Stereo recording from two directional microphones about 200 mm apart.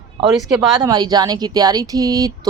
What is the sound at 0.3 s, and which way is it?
Speech, centre (ahead or behind).